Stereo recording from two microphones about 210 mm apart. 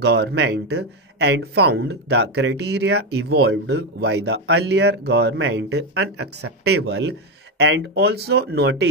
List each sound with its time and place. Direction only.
0.0 s speech: 50° right (ahead or behind)
6.1 s speech: 90° right
6.9 s speech: 60° right (ahead or behind)